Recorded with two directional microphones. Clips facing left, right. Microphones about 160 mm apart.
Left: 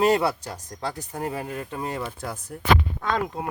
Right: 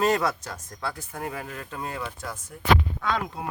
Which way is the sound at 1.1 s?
20° left (ahead or behind).